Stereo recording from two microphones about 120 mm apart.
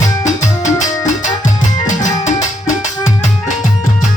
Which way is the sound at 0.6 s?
90° left.